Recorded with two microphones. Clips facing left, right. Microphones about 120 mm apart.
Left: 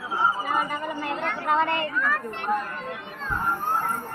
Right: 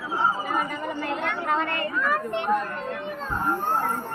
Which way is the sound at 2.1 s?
15° right (ahead or behind).